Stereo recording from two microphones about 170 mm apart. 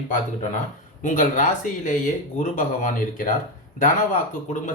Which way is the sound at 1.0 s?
50° left (ahead or behind).